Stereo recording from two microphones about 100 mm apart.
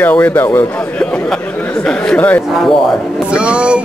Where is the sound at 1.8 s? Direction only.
10° left (ahead or behind).